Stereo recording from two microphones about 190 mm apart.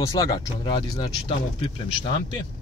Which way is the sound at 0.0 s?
20° left (ahead or behind).